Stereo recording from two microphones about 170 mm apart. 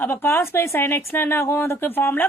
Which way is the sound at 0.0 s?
15° left (ahead or behind).